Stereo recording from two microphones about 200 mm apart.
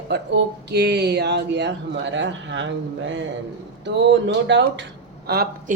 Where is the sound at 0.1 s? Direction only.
55° right (ahead or behind).